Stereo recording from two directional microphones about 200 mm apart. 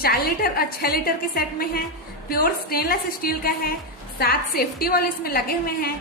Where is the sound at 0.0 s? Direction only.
50° left (ahead or behind).